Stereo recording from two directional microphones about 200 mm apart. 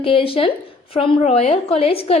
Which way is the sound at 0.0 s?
25° left (ahead or behind).